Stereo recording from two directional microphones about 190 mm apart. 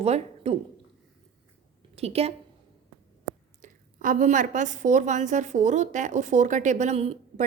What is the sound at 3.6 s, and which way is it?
A woman's voice, 45° right (ahead or behind).